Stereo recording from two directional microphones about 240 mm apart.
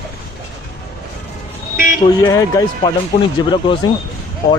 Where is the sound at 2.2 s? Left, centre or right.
Centre.